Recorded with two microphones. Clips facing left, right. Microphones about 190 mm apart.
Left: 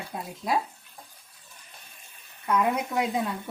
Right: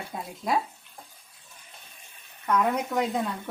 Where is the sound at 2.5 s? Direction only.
5° left (ahead or behind).